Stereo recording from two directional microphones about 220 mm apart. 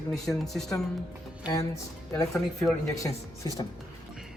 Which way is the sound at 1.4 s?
15° left (ahead or behind).